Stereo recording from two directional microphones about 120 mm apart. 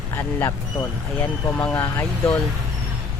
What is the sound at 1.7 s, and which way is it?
Speech, 25° left (ahead or behind).